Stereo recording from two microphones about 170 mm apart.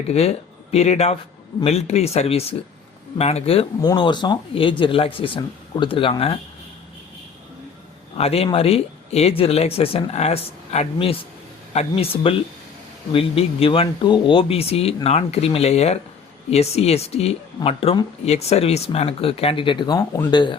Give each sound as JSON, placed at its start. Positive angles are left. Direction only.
{"t": 0.1, "sound": "speech", "side_deg": 40}
{"t": 8.1, "sound": "speech", "side_deg": 35}